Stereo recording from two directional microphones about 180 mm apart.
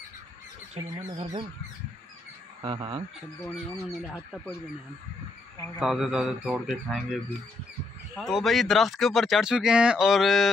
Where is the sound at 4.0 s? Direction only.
Centre (ahead or behind).